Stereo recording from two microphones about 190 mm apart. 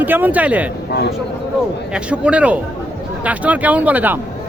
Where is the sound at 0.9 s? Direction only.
60° left (ahead or behind).